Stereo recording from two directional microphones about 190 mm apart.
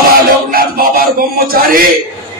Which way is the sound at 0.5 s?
50° right (ahead or behind).